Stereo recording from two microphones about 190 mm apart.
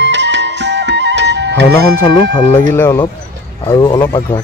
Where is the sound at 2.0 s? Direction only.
20° left (ahead or behind).